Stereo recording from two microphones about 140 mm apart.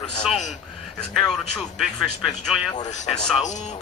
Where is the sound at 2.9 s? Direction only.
55° left (ahead or behind).